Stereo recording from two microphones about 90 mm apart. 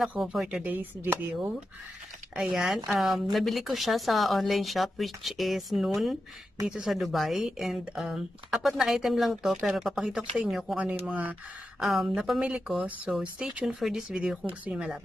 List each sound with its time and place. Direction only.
0.2 s speech: 5° right (ahead or behind)
0.7 s speech: 20° right (ahead or behind)
2.3 s speech: 5° right (ahead or behind)
11.1 s speech: 20° right (ahead or behind)
11.8 s speech: centre (ahead or behind)